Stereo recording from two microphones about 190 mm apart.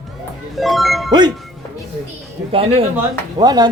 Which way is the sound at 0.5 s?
Centre (ahead or behind).